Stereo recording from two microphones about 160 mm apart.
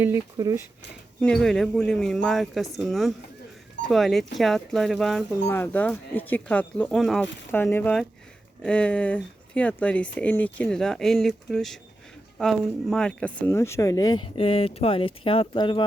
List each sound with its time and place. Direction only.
0.3 s speech: 25° right (ahead or behind)
1.2 s speech: 5° left (ahead or behind)
5.5 s speech: 15° left (ahead or behind)
7.5 s speech: 15° left (ahead or behind); by 15.8 s 30° left (ahead or behind)